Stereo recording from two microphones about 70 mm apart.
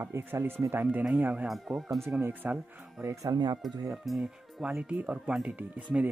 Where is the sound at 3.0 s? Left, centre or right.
Right.